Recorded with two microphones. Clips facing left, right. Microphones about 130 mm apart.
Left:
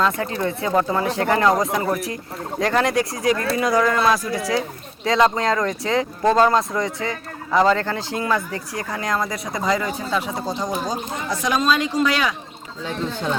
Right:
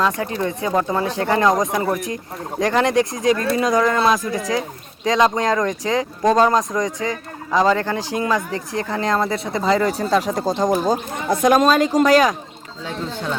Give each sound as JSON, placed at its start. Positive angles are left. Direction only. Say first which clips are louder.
{"t": 0.0, "sound": "speech", "louder": "right 1 dB", "side_deg": -20}
{"t": 10.6, "sound": "speech", "louder": "right 7 dB", "side_deg": -50}